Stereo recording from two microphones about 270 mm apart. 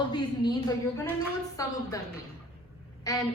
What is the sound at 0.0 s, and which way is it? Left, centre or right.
A woman's voice, centre.